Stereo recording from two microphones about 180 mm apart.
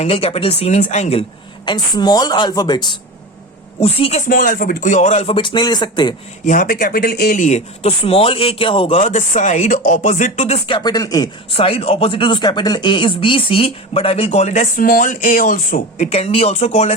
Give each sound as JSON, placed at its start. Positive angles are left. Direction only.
{"t": 0.0, "sound": "speech", "side_deg": 30}
{"t": 1.6, "sound": "speech", "side_deg": 25}
{"t": 4.3, "sound": "speech", "side_deg": 50}
{"t": 6.4, "sound": "speech", "side_deg": 50}
{"t": 11.5, "sound": "speech", "side_deg": 30}